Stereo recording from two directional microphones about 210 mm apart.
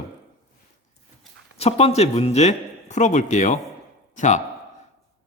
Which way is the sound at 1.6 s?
30° left (ahead or behind).